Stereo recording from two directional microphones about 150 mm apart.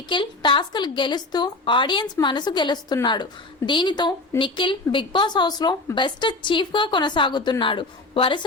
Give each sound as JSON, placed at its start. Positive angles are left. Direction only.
{"t": 0.1, "sound": "a woman's voice", "side_deg": 30}